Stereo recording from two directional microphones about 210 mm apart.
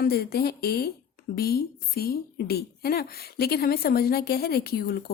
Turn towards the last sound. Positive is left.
turn(degrees=50)  # may be behind; listen again after turning